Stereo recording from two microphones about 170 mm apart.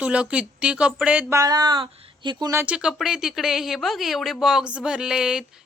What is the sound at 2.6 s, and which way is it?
Speech, 5° right (ahead or behind).